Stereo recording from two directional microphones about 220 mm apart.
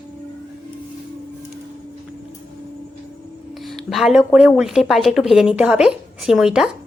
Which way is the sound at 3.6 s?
Centre (ahead or behind).